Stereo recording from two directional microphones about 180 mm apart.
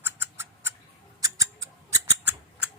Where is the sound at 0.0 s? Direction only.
10° right (ahead or behind).